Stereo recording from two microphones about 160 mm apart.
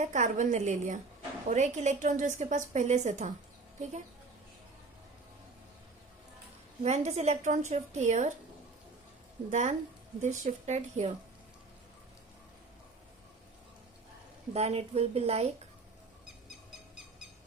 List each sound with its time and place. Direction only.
0.0 s a woman's voice: 50° right (ahead or behind)
6.8 s a woman's voice: 45° right (ahead or behind)
9.5 s a woman's voice: 50° right (ahead or behind)
14.5 s a woman's voice: 40° right (ahead or behind)